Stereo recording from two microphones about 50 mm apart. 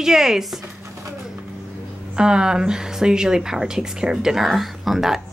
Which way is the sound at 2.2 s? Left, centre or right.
Centre.